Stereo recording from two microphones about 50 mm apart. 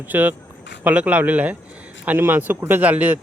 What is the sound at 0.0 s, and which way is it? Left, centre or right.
Speech, right.